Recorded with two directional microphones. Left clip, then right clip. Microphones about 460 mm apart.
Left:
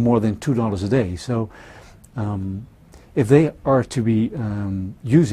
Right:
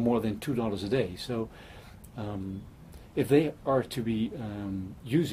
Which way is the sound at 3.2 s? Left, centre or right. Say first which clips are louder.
Left 9 dB; left.